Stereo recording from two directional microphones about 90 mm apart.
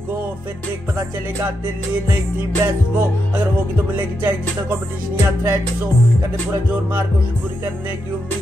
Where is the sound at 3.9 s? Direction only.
20° right (ahead or behind).